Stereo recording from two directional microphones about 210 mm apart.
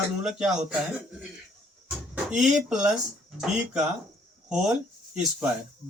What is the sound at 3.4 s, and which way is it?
Speech, 5° right (ahead or behind).